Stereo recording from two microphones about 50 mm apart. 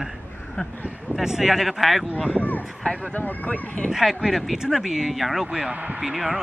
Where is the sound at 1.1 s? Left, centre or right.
Centre.